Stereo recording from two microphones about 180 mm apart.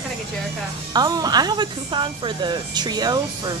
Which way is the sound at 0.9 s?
20° right (ahead or behind).